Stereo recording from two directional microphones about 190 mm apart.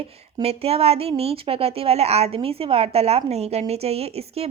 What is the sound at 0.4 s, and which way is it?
Speech, 30° right (ahead or behind).